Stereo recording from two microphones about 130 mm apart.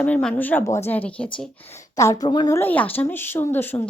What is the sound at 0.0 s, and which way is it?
A woman's voice, 5° left (ahead or behind).